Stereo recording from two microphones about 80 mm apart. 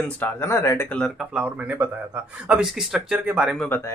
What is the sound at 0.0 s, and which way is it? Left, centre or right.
Speech, left.